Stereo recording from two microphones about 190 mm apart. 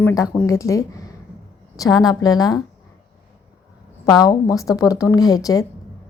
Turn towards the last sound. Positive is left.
turn(degrees=20)  # may be behind; listen again after turning